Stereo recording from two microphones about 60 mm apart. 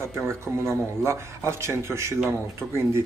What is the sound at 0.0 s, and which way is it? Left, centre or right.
Speech, right.